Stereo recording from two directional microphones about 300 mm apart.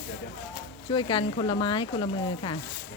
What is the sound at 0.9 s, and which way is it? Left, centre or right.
Speech, centre.